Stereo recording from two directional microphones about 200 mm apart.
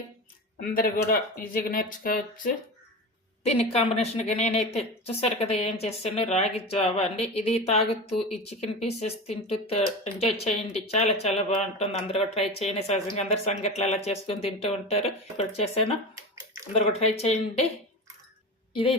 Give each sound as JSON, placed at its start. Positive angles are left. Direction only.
{"t": 0.6, "sound": "speech", "side_deg": 45}
{"t": 3.4, "sound": "a woman's voice", "side_deg": 30}
{"t": 16.1, "sound": "bathtub", "side_deg": -15}
{"t": 16.7, "sound": "a woman's voice", "side_deg": 30}
{"t": 18.7, "sound": "a woman's voice", "side_deg": 25}